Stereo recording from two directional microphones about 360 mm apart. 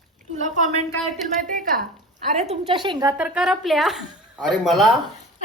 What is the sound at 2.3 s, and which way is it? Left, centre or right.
A woman's voice, centre.